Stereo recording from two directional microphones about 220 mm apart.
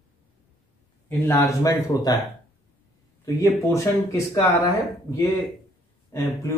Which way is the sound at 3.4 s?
15° left (ahead or behind).